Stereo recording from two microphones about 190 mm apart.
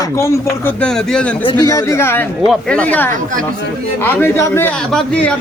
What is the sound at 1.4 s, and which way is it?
Speech, 20° left (ahead or behind).